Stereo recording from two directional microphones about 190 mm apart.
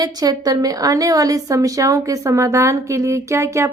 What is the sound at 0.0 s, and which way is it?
A woman's voice, 20° right (ahead or behind).